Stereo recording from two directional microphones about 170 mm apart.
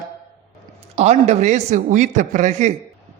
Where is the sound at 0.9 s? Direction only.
40° right (ahead or behind).